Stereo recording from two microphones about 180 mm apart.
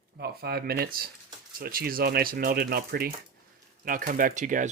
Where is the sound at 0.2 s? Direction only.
60° right (ahead or behind).